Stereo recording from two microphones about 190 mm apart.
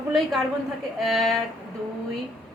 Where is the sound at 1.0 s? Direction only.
Centre (ahead or behind).